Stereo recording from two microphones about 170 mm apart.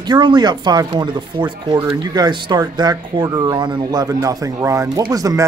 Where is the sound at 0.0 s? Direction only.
25° right (ahead or behind).